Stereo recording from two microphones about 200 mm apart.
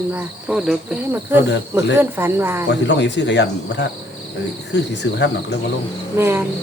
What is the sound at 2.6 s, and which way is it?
Cricket, 60° left (ahead or behind).